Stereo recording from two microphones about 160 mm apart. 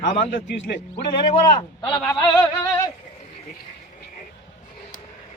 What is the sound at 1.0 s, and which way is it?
Speech, 35° left (ahead or behind).